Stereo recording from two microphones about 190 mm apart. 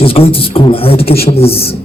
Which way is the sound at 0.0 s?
30° left (ahead or behind).